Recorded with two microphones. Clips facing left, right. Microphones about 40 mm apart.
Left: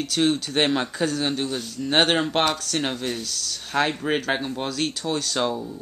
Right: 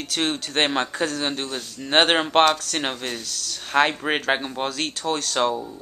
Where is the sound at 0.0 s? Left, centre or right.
Right.